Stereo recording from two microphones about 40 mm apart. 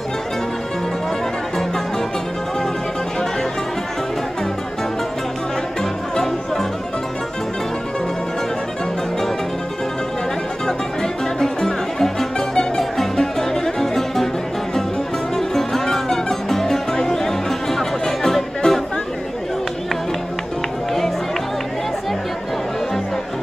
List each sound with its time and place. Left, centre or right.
5.8 s music: centre
11.0 s music: centre